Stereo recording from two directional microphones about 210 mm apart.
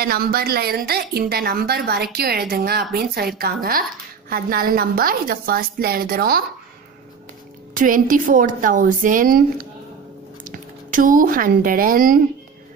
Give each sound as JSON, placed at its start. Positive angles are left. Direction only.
{"t": 0.0, "sound": "a woman's voice", "side_deg": -45}
{"t": 7.7, "sound": "a woman's voice", "side_deg": -40}
{"t": 10.4, "sound": "a woman's voice", "side_deg": -40}